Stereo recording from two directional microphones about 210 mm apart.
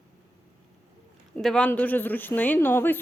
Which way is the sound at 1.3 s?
5° left (ahead or behind).